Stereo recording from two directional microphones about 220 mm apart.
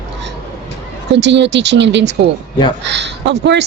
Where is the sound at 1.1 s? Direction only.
55° right (ahead or behind).